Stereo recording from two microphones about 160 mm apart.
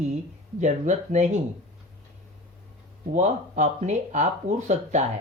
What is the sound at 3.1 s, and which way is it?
Speech, 50° right (ahead or behind).